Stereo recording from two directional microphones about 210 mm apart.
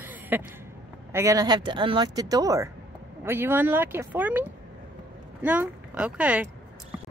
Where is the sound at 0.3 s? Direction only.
10° right (ahead or behind).